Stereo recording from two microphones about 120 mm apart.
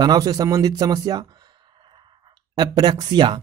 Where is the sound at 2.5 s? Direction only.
35° right (ahead or behind).